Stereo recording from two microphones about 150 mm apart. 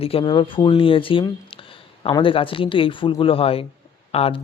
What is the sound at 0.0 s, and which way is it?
Speech, 35° left (ahead or behind).